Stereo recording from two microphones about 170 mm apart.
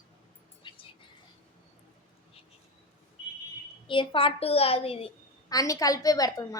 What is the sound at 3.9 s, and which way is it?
A child's voice, 30° left (ahead or behind).